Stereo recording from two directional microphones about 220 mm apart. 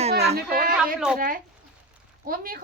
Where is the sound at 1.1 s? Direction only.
40° right (ahead or behind).